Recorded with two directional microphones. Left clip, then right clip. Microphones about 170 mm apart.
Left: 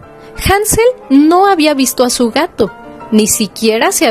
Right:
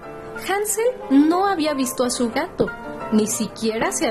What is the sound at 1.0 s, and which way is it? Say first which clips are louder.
Speech: left 8 dB; 35° left (ahead or behind).